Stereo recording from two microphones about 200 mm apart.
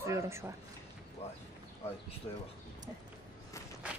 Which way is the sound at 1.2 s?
30° left (ahead or behind).